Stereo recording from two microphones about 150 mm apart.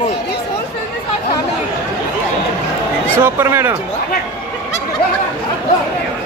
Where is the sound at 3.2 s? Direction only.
15° right (ahead or behind).